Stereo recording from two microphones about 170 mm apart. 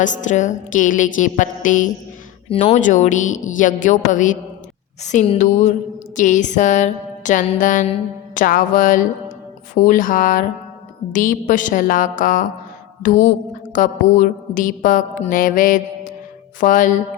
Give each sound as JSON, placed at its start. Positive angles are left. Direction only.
{"t": 0.0, "sound": "mantra", "side_deg": 45}